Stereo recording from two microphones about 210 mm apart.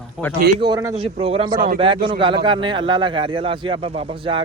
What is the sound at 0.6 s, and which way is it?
A man's voice, 20° right (ahead or behind).